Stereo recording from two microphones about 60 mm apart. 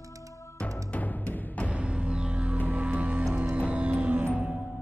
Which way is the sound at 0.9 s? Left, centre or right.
Left.